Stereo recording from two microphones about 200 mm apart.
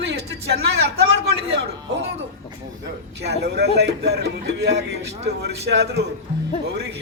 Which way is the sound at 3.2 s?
55° right (ahead or behind).